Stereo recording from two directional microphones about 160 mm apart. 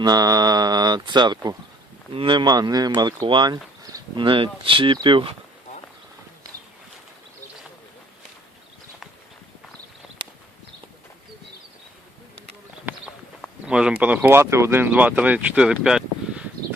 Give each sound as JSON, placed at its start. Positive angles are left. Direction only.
{"t": 0.0, "sound": "speech", "side_deg": -25}
{"t": 13.4, "sound": "speech", "side_deg": -5}